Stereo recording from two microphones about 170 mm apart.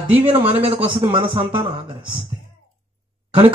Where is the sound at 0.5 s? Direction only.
35° right (ahead or behind).